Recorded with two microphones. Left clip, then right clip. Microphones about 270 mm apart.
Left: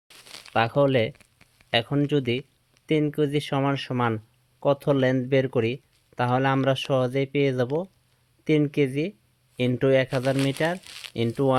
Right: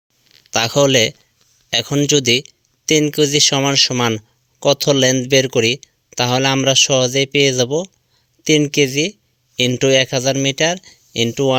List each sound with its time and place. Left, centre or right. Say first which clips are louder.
0.5 s speech: right 7 dB; right